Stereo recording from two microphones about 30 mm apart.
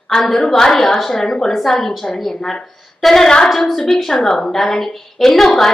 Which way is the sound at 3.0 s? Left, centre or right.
Centre.